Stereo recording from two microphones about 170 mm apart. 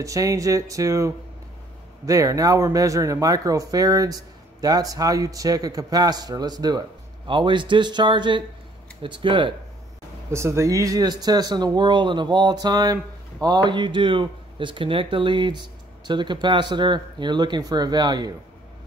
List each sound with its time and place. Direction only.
0.0 s speech: 20° right (ahead or behind)
10.3 s speech: 15° right (ahead or behind)